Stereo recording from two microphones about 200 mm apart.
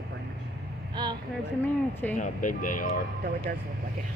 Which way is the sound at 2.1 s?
40° left (ahead or behind).